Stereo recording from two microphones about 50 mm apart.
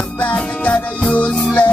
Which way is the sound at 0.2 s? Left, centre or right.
Left.